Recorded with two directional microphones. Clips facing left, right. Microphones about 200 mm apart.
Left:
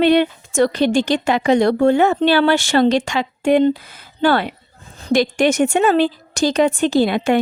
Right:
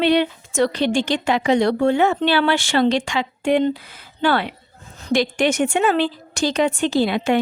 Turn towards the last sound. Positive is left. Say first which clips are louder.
# left 3 dB
turn(degrees=50)  # may be behind; listen again after turning